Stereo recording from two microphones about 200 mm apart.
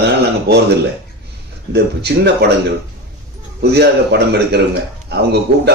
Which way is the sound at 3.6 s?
55° right (ahead or behind).